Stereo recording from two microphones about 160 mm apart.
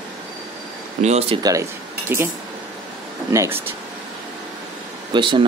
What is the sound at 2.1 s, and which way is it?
Speech, 15° right (ahead or behind).